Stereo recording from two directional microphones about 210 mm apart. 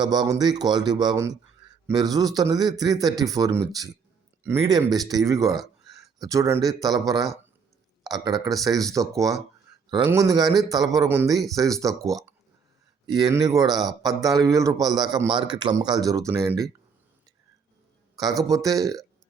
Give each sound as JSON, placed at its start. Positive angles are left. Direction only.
{"t": 0.0, "sound": "a man's voice", "side_deg": -20}
{"t": 8.2, "sound": "a man's voice", "side_deg": -20}
{"t": 18.4, "sound": "a man's voice", "side_deg": -15}